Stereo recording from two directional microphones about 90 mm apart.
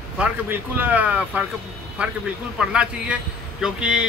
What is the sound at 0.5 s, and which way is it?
Speech, 20° right (ahead or behind).